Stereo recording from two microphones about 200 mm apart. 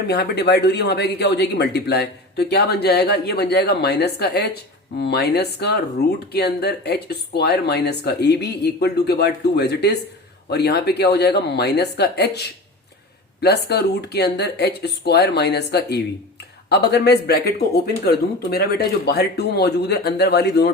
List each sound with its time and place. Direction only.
0.1 s speech: 55° left (ahead or behind)